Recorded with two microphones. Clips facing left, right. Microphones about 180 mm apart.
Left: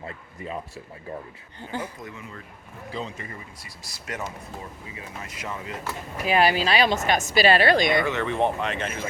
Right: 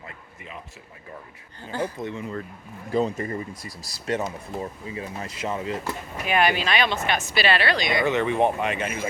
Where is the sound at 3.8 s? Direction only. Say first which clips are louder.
Right 7 dB; 30° right (ahead or behind).